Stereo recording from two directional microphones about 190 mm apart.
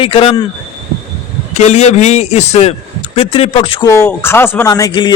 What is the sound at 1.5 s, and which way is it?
A man's voice, 35° left (ahead or behind).